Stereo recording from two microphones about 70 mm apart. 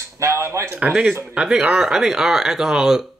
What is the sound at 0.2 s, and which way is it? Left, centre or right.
Speech, right.